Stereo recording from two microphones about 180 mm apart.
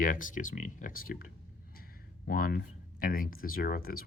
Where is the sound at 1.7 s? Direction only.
55° left (ahead or behind).